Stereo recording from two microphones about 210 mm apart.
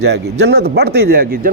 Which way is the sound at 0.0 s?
55° right (ahead or behind).